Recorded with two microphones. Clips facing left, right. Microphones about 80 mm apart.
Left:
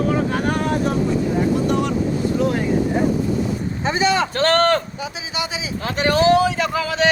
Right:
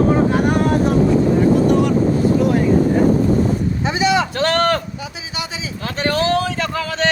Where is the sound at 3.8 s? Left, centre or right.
Left.